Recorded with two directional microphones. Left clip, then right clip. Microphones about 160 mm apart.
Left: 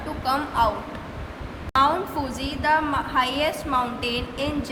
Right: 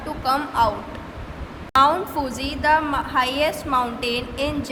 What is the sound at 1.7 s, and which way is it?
A woman's voice, 35° right (ahead or behind).